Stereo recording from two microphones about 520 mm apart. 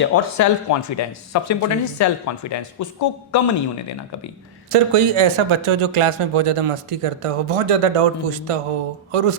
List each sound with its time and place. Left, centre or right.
0.0 s speech: left
4.7 s speech: right